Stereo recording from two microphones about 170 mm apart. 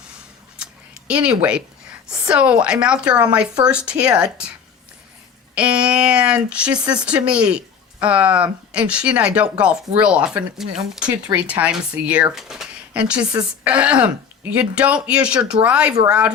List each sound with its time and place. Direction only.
0.5 s scissors: 5° right (ahead or behind)
2.0 s speech: 5° right (ahead or behind)
5.5 s speech: 5° right (ahead or behind)
6.7 s speech: 25° right (ahead or behind)
7.0 s speech: 5° right (ahead or behind)